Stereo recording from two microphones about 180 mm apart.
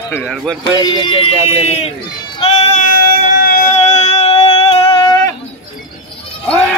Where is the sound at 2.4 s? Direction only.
35° left (ahead or behind).